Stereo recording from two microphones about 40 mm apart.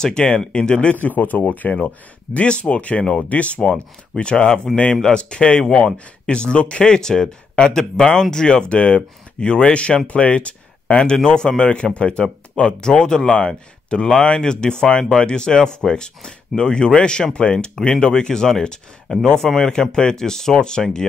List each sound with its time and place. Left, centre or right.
0.0 s speech: left
1.0 s speech: left
1.6 s speech: left
4.7 s speech: centre
5.0 s speech: left
8.6 s speech: left; by 21.0 s centre